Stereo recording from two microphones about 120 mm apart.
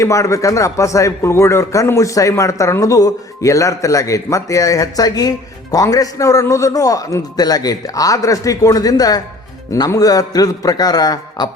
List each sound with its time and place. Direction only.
0.0 s a man's voice: 25° left (ahead or behind)